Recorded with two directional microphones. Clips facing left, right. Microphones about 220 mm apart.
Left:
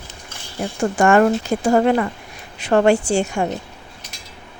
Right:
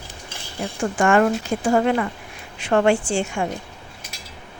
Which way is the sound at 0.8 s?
40° left (ahead or behind).